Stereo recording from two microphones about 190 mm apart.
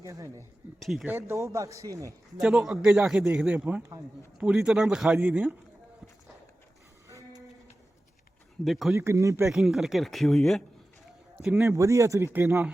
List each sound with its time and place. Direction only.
0.0 s speech: 15° right (ahead or behind)
0.8 s a man's voice: centre (ahead or behind)
1.1 s speech: 15° right (ahead or behind)
2.4 s a man's voice: centre (ahead or behind)
7.1 s a sound: 15° right (ahead or behind)
8.6 s a man's voice: centre (ahead or behind)
9.0 s speech: 15° right (ahead or behind)
9.5 s a man's voice: centre (ahead or behind)
11.6 s speech: 15° right (ahead or behind)